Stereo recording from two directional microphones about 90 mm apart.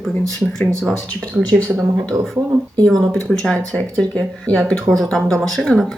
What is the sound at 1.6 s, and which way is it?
Speech, 30° right (ahead or behind).